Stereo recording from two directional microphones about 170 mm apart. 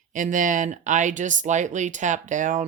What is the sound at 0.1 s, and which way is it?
Speech, 50° right (ahead or behind).